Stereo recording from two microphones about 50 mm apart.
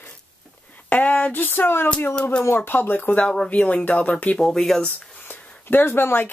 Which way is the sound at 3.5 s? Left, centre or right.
Left.